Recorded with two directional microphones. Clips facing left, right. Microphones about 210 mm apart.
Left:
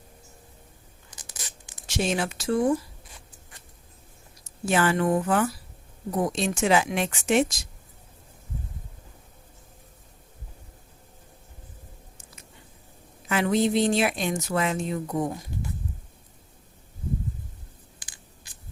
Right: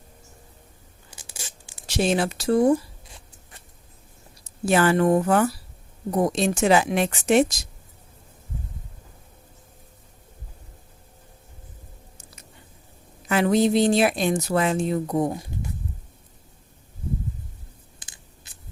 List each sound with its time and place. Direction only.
1.1 s tearing: 25° right (ahead or behind)
1.9 s speech: 35° right (ahead or behind)
4.4 s speech: 40° right (ahead or behind)
13.2 s speech: 40° right (ahead or behind)